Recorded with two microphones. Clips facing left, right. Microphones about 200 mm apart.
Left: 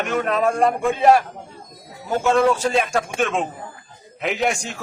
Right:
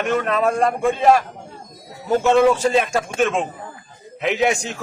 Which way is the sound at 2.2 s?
Centre (ahead or behind).